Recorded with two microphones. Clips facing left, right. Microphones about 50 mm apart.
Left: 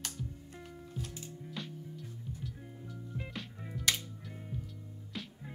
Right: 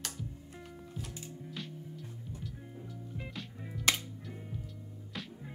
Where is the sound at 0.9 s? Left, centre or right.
Centre.